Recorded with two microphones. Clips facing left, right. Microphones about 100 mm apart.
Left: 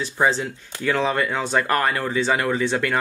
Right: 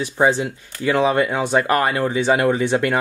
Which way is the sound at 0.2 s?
15° right (ahead or behind).